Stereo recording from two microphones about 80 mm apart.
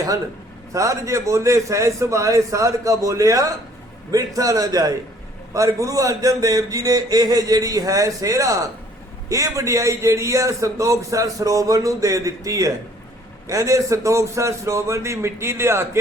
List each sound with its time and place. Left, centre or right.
0.7 s a man's voice: right